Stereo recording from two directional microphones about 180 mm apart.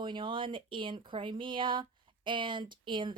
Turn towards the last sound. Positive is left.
turn(degrees=-25)  # may be behind; listen again after turning